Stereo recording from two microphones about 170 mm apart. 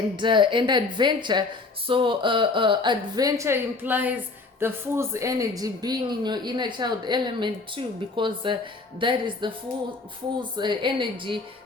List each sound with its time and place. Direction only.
0.2 s speech: 30° right (ahead or behind)
10.6 s speech: 25° right (ahead or behind)